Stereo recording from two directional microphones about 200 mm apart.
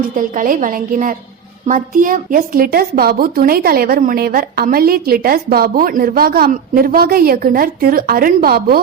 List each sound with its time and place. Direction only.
0.2 s a woman's voice: 40° right (ahead or behind)